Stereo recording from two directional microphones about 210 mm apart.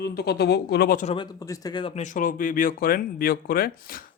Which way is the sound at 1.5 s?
20° left (ahead or behind).